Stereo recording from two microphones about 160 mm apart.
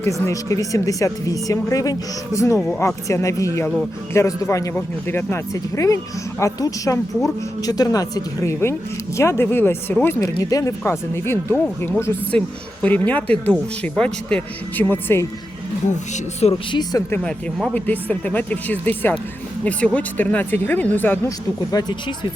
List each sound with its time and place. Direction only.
0.0 s a woman's voice: 20° left (ahead or behind)
2.6 s speech: 5° left (ahead or behind)
2.8 s a woman's voice: 20° left (ahead or behind)
15.9 s speech: 45° left (ahead or behind)
17.1 s speech: 10° left (ahead or behind)
21.7 s a woman's voice: 25° left (ahead or behind)